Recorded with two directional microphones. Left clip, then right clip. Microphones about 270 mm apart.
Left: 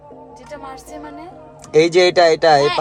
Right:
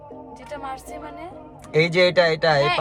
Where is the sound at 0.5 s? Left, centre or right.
Centre.